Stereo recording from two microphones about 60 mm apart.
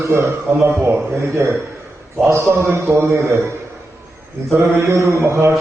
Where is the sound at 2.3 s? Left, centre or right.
Right.